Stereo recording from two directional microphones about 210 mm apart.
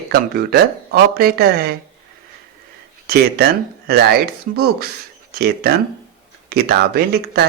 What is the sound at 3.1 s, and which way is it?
Speech, 50° right (ahead or behind).